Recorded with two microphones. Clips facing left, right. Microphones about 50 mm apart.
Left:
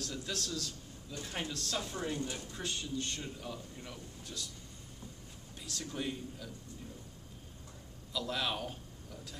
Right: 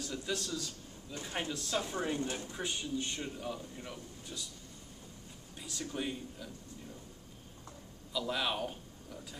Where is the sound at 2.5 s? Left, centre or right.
Centre.